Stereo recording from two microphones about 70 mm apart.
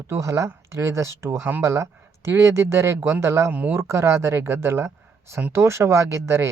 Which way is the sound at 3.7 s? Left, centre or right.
Right.